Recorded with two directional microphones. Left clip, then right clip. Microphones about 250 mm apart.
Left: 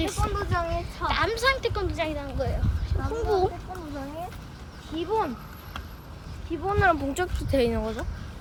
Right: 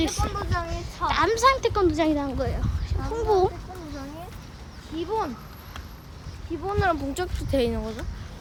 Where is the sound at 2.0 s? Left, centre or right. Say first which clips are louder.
Right 6 dB; right.